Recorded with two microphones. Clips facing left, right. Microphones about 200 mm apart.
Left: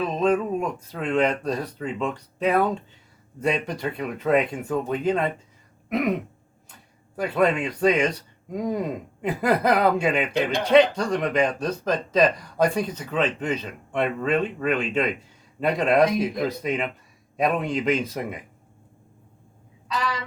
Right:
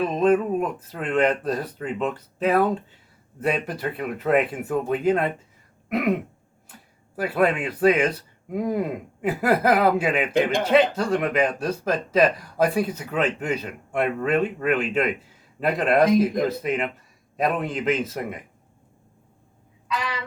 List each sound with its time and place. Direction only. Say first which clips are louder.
0.0 s speech: right 2 dB; 5° right (ahead or behind)
7.2 s speech: even; 5° right (ahead or behind)
19.9 s a sound: left 1 dB; 40° left (ahead or behind)